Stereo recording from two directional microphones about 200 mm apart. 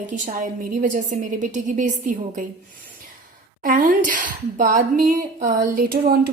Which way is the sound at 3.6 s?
40° right (ahead or behind).